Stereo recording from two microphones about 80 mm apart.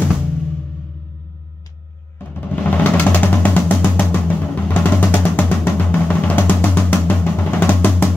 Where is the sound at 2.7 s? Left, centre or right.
Centre.